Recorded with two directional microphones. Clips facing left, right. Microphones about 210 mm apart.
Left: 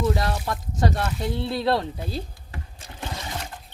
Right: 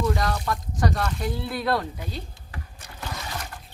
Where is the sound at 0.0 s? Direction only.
30° left (ahead or behind).